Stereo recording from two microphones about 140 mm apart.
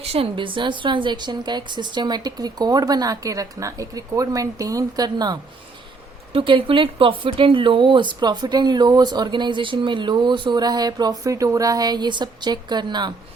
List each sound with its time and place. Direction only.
0.0 s speech: 45° right (ahead or behind)